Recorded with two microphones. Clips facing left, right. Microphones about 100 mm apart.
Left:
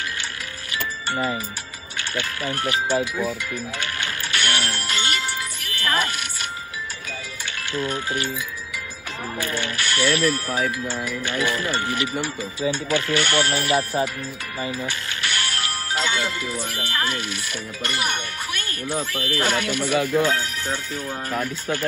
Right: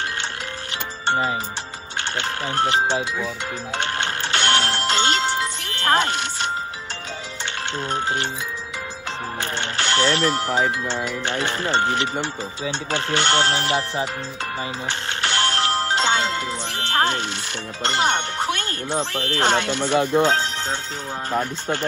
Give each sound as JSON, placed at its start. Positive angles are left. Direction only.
{"t": 1.0, "sound": "music", "side_deg": -25}
{"t": 2.0, "sound": "speech", "side_deg": -25}
{"t": 3.7, "sound": "music", "side_deg": -25}
{"t": 7.7, "sound": "speech", "side_deg": -25}
{"t": 9.4, "sound": "speech", "side_deg": -25}
{"t": 14.9, "sound": "music", "side_deg": -25}
{"t": 16.8, "sound": "speech", "side_deg": -25}